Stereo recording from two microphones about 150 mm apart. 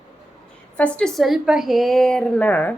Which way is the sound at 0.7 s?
5° left (ahead or behind).